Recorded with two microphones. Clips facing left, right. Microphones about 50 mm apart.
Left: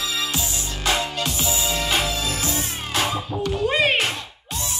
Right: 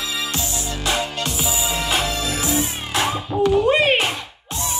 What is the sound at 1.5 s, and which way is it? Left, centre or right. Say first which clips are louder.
Music: right 1 dB; centre.